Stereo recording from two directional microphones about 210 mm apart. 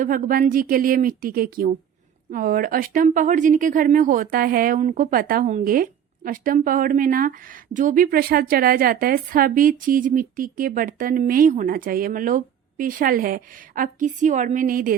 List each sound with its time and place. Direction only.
0.0 s speech: 40° right (ahead or behind)